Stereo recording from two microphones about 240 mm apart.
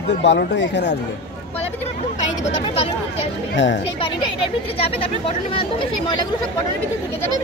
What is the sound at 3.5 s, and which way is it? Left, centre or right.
Speech, left.